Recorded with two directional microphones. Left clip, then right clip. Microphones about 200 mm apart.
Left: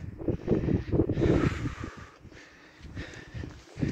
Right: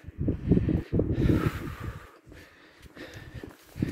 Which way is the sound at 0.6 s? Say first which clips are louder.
Left 1 dB; 25° right (ahead or behind).